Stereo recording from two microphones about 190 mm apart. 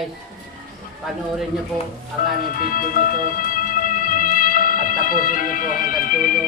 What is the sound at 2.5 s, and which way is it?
Music, 50° left (ahead or behind).